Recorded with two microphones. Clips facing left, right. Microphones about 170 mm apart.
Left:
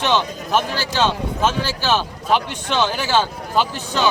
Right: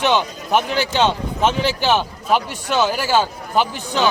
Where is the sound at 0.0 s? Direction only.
15° right (ahead or behind).